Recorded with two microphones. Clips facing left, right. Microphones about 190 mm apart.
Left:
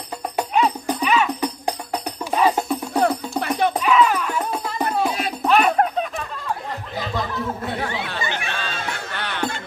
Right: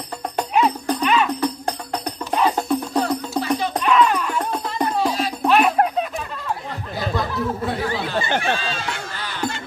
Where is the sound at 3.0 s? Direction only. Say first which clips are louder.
Left 3 dB; 60° left (ahead or behind).